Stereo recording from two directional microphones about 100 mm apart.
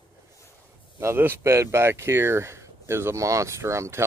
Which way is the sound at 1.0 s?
25° right (ahead or behind).